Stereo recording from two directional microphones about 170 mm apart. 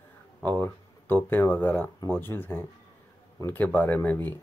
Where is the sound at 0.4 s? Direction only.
10° left (ahead or behind).